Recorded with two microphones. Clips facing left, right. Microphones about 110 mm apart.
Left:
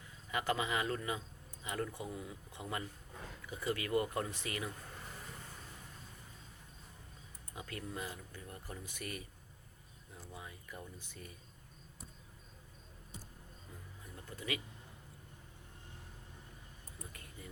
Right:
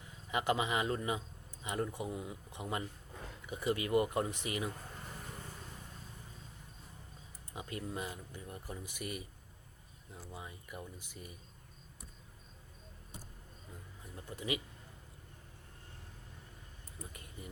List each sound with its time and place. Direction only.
0.3 s speech: 20° right (ahead or behind)
7.5 s speech: 20° right (ahead or behind)
14.0 s vehicle: 20° right (ahead or behind)
17.0 s a sound: 20° right (ahead or behind)